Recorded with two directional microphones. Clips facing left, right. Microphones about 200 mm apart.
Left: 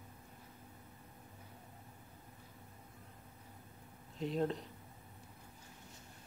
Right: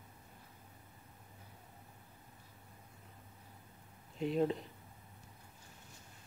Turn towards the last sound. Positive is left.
turn(degrees=-5)  # may be behind; listen again after turning